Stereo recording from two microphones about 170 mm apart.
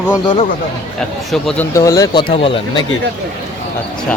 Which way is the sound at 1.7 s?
15° left (ahead or behind).